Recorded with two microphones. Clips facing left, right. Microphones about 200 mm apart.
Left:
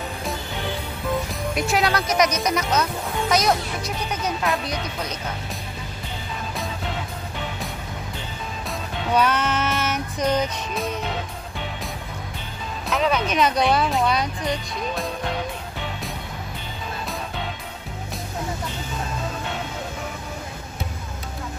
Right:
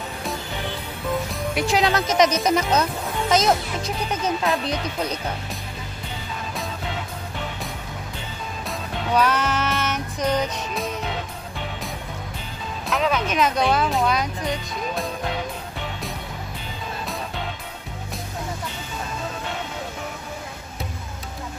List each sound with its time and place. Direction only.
1.3 s music: 10° right (ahead or behind)
1.8 s speech: 20° right (ahead or behind)
8.6 s music: centre (ahead or behind)
12.8 s speech: centre (ahead or behind)
14.8 s music: centre (ahead or behind)